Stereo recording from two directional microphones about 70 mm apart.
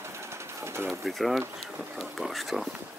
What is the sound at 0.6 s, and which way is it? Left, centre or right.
Bird, right.